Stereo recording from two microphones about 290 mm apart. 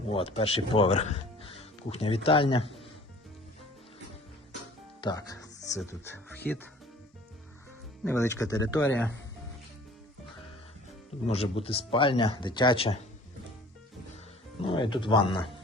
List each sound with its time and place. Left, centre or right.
0.1 s speech: centre
4.9 s speech: centre
8.0 s speech: centre
11.3 s speech: centre
14.6 s speech: centre